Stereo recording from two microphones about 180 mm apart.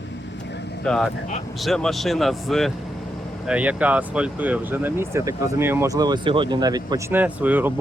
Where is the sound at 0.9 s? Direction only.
5° left (ahead or behind).